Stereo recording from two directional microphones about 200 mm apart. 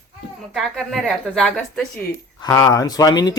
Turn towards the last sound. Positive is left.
turn(degrees=20)  # may be behind; listen again after turning